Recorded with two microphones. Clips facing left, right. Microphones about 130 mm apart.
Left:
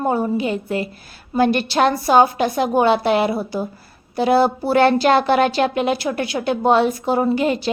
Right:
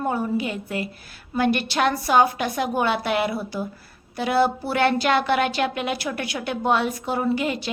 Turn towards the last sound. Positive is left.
turn(degrees=35)  # may be behind; listen again after turning